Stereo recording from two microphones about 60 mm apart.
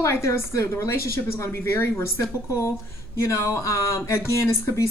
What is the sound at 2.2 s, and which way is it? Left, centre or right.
A woman's voice, left.